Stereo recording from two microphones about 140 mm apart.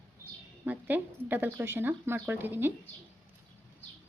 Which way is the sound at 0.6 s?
15° right (ahead or behind).